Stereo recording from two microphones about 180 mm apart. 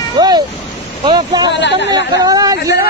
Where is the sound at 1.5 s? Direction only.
75° left (ahead or behind).